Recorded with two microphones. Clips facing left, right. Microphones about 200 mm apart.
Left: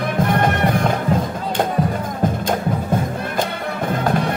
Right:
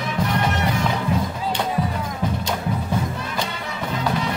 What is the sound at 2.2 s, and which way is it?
Music, 50° left (ahead or behind).